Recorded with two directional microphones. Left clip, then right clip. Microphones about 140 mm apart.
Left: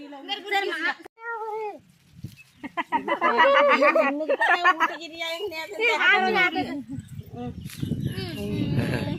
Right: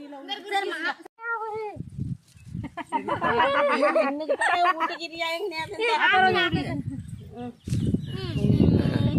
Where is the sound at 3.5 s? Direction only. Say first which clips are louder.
Left 4 dB; 30° left (ahead or behind).